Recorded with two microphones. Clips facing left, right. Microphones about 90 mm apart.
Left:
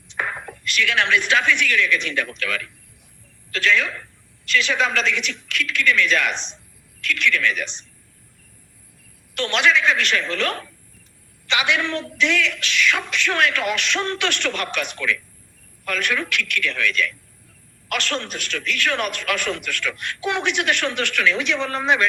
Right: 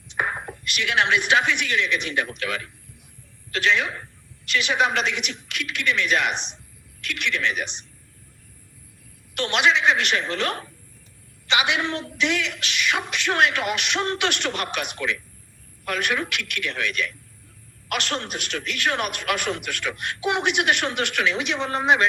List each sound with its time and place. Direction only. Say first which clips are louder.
0.1 s a man's voice: right 1 dB; 20° right (ahead or behind)
9.3 s a man's voice: left 1 dB; 15° right (ahead or behind)